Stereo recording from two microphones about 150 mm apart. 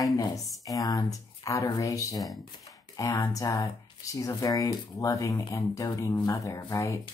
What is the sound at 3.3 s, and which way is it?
Speech, 20° left (ahead or behind).